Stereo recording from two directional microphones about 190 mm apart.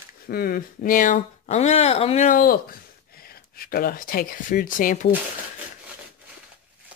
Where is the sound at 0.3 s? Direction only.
50° left (ahead or behind).